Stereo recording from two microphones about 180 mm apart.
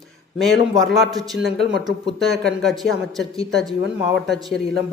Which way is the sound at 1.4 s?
65° right (ahead or behind).